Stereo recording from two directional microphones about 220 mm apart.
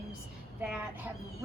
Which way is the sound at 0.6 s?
5° right (ahead or behind).